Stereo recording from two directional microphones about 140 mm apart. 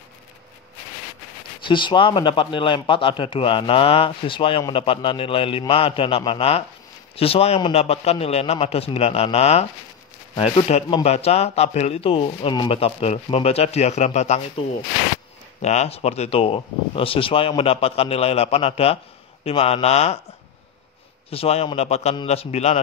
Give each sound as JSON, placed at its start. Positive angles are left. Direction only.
{"t": 1.7, "sound": "speech", "side_deg": 35}
{"t": 10.7, "sound": "speech", "side_deg": 45}
{"t": 15.6, "sound": "speech", "side_deg": 55}
{"t": 21.3, "sound": "speech", "side_deg": 45}